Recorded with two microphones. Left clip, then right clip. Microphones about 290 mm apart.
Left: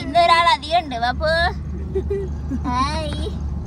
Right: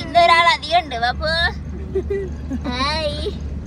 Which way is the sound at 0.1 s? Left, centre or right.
Centre.